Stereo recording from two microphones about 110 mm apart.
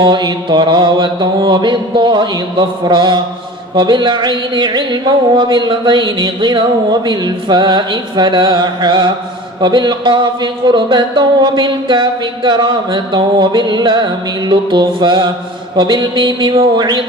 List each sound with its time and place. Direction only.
0.0 s a man's voice: 45° right (ahead or behind)